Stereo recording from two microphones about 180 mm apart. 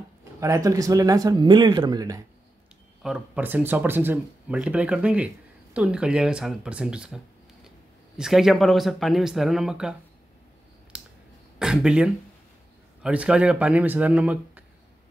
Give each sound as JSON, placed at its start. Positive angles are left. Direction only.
{"t": 0.2, "sound": "speech", "side_deg": -15}
{"t": 3.0, "sound": "speech", "side_deg": -5}
{"t": 8.2, "sound": "speech", "side_deg": 0}
{"t": 10.9, "sound": "a sound", "side_deg": -5}
{"t": 11.6, "sound": "speech", "side_deg": -5}